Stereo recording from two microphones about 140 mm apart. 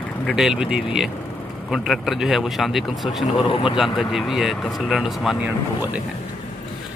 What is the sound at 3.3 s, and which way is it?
Speech, 40° left (ahead or behind).